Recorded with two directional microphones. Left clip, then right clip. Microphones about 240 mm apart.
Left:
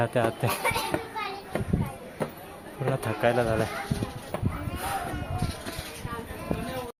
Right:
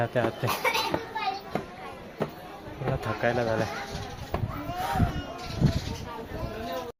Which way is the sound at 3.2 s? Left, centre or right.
Centre.